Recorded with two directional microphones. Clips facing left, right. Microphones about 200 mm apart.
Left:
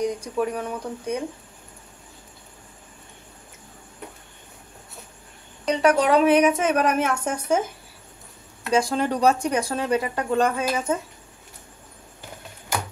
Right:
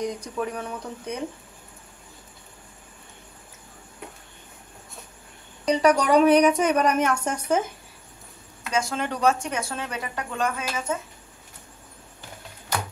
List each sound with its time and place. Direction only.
0.2 s speech: 10° left (ahead or behind)
5.7 s a woman's voice: centre (ahead or behind)
8.7 s speech: 35° left (ahead or behind)